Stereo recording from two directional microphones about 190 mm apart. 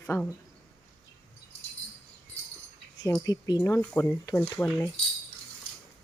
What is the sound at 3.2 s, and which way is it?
Speech, 20° left (ahead or behind).